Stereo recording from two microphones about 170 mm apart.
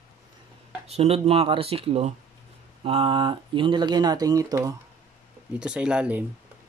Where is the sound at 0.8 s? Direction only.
35° right (ahead or behind); by 4.7 s 20° right (ahead or behind).